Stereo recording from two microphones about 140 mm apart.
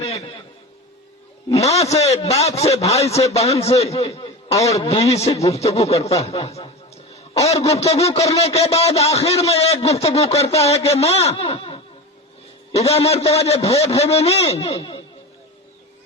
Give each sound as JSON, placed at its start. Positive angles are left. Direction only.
{"t": 1.8, "sound": "a man's voice", "side_deg": 50}
{"t": 3.9, "sound": "a sound", "side_deg": 45}
{"t": 4.5, "sound": "a man's voice", "side_deg": 20}
{"t": 4.8, "sound": "a man's voice", "side_deg": 45}